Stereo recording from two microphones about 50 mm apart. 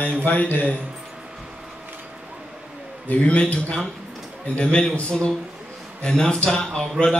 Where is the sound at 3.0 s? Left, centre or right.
Left.